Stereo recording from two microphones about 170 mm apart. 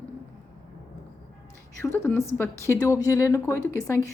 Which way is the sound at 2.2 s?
15° left (ahead or behind).